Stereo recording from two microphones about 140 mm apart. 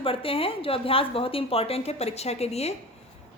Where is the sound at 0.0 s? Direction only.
40° left (ahead or behind).